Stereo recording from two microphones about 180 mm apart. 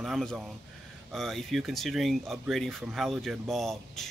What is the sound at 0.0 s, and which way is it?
Speech, centre (ahead or behind).